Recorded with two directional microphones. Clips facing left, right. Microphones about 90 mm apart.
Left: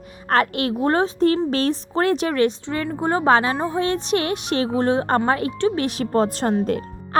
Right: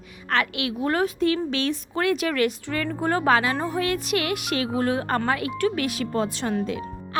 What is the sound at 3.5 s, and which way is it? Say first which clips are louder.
Speech: left 3 dB; 20° left (ahead or behind).